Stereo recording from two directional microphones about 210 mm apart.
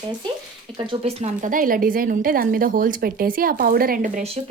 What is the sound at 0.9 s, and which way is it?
A woman's voice, 30° right (ahead or behind).